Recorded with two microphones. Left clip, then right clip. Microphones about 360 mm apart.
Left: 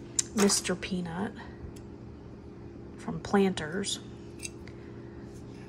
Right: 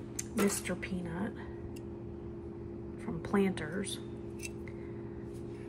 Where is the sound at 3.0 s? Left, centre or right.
Centre.